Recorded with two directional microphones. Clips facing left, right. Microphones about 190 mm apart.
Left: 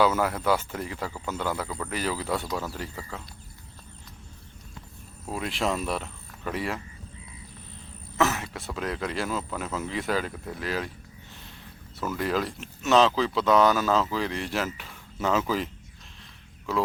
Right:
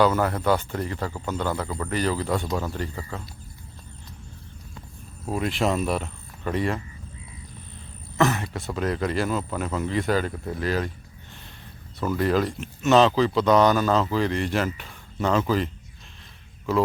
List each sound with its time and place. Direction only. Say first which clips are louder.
0.0 s speech: right 2 dB; 5° left (ahead or behind)
5.3 s speech: right 4 dB; centre (ahead or behind)
8.2 s speech: right 3 dB; centre (ahead or behind)
11.9 s speech: right 5 dB; centre (ahead or behind)